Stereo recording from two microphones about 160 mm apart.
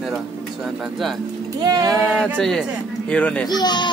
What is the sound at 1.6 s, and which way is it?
Speech, 25° right (ahead or behind).